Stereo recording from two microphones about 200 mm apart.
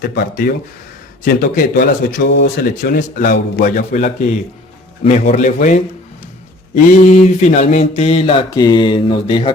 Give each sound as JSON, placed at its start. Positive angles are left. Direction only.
{"t": 0.0, "sound": "speech", "side_deg": 50}
{"t": 2.6, "sound": "speech", "side_deg": 45}
{"t": 3.9, "sound": "speech", "side_deg": 35}
{"t": 6.7, "sound": "mantra", "side_deg": 35}